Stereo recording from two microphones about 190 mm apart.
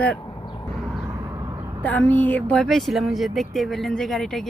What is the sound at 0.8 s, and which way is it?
Vehicle, 5° right (ahead or behind).